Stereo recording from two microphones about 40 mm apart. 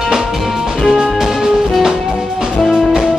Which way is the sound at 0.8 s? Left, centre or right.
Centre.